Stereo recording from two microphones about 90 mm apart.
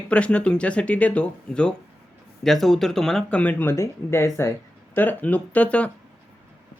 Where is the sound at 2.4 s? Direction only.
5° left (ahead or behind); by 4.5 s 30° left (ahead or behind).